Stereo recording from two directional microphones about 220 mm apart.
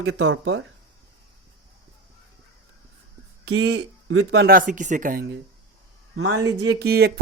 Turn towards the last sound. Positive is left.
turn(degrees=-45)  # may be behind; listen again after turning